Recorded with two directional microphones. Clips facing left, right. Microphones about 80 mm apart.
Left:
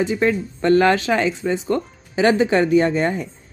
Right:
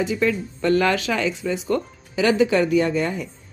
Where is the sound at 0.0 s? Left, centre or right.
Left.